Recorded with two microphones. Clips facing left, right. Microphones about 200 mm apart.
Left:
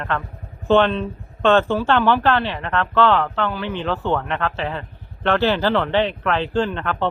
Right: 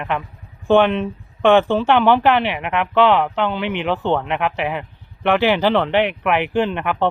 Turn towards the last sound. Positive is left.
turn(degrees=-15)  # may be behind; listen again after turning